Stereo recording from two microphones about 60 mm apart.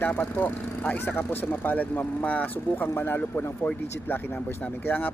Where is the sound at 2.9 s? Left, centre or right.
Left.